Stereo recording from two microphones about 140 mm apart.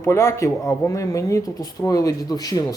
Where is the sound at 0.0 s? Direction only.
20° left (ahead or behind).